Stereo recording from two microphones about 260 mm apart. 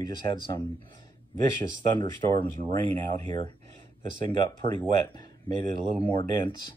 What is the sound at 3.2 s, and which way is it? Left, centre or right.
Speech, right.